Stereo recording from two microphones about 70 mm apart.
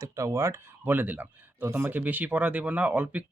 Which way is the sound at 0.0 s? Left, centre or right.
Right.